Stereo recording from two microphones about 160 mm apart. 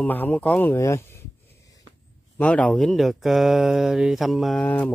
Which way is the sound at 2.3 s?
10° left (ahead or behind).